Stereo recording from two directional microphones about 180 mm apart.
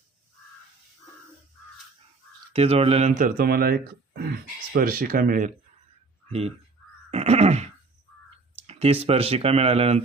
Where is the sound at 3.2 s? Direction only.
50° right (ahead or behind).